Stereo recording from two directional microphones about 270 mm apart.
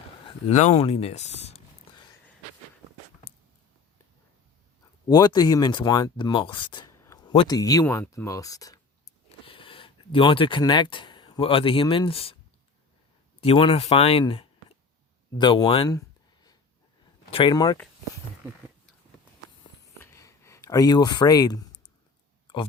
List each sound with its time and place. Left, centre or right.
0.3 s speech: left
5.0 s speech: centre
13.4 s speech: centre
15.4 s a sound: centre
17.3 s speech: centre
19.6 s a sound: centre